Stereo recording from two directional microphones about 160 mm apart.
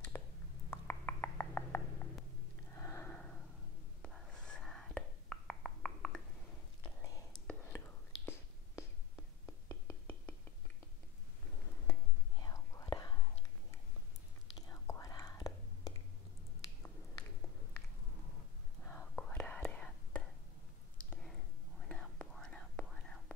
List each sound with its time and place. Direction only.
0.1 s a sound: 15° left (ahead or behind)
0.7 s frog: 15° left (ahead or behind)
2.7 s a sound: 15° left (ahead or behind)
4.0 s whispering: 5° left (ahead or behind)
9.5 s music: 15° left (ahead or behind)
11.9 s whispering: 20° left (ahead or behind)
14.7 s whispering: 20° left (ahead or behind)
18.9 s whispering: 10° left (ahead or behind)
21.1 s a sound: 5° left (ahead or behind)
21.8 s whispering: 5° left (ahead or behind)